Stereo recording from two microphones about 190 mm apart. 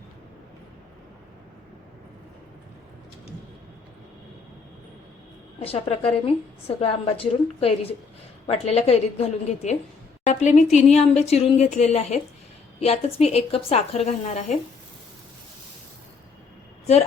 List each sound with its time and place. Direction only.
5.5 s a woman's voice: 30° left (ahead or behind)